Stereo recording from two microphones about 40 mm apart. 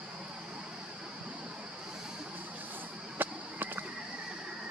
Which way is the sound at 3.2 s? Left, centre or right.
Right.